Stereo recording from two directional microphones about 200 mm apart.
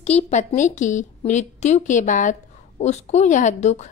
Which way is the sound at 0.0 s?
35° left (ahead or behind).